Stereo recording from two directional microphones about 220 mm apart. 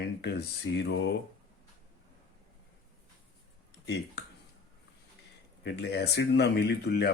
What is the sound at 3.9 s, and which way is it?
Speech, 50° left (ahead or behind).